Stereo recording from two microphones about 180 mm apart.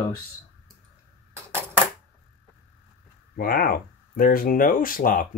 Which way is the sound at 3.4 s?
55° left (ahead or behind).